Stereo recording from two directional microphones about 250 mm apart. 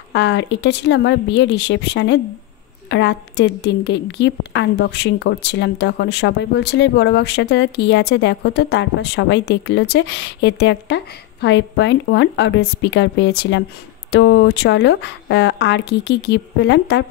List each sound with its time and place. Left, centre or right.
0.1 s a woman's voice: left